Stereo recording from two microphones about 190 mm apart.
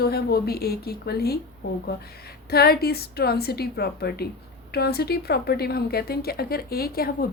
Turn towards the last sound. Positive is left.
turn(degrees=55)  # may be behind; listen again after turning